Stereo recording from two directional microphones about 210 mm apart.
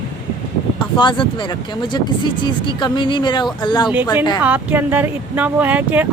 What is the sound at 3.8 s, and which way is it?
A woman's voice, 5° right (ahead or behind).